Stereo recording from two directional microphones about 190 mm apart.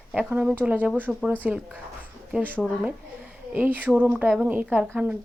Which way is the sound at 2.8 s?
10° right (ahead or behind).